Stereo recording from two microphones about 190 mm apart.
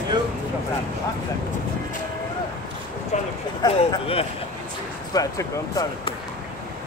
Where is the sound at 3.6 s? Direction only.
25° left (ahead or behind).